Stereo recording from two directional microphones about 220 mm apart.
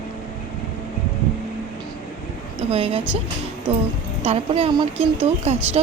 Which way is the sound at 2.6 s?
25° right (ahead or behind).